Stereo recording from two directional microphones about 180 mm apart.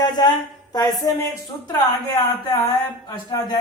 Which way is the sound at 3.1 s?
25° left (ahead or behind).